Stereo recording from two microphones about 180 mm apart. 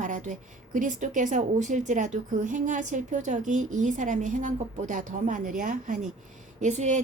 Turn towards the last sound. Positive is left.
turn(degrees=-40)  # may be behind; listen again after turning